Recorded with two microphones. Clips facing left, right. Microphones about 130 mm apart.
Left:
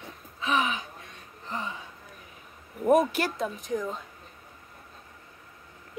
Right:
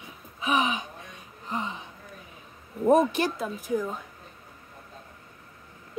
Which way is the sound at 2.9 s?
25° right (ahead or behind).